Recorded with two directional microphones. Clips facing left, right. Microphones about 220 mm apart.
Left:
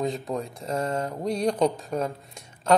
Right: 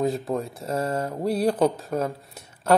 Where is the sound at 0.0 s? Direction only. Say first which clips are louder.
Right 3 dB; centre (ahead or behind).